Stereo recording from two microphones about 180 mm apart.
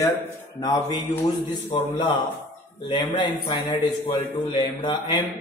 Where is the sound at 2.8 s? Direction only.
25° left (ahead or behind).